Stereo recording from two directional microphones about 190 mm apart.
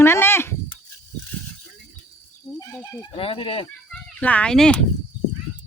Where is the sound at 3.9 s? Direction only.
5° left (ahead or behind).